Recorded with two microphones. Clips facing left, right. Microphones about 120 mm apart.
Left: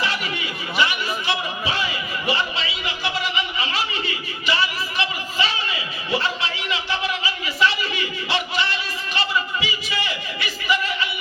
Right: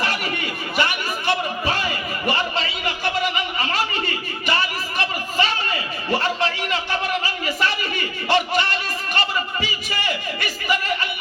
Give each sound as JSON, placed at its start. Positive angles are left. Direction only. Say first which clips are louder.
{"t": 0.0, "sound": "chatter", "louder": "right 1 dB", "side_deg": -50}